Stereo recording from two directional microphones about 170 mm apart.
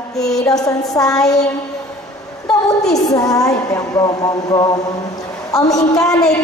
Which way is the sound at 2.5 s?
5° left (ahead or behind).